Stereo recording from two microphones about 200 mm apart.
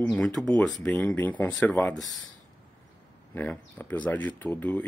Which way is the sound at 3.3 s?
10° left (ahead or behind).